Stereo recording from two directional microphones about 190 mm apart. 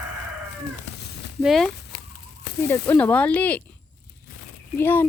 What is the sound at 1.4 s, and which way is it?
Speech, centre (ahead or behind).